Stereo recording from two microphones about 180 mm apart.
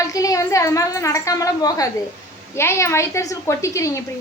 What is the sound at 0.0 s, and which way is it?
A woman's voice, 20° left (ahead or behind).